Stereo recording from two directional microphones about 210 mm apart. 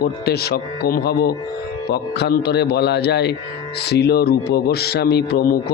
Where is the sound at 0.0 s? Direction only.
50° left (ahead or behind).